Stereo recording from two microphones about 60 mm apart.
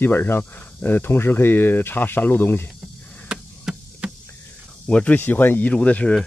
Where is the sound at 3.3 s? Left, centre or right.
Centre.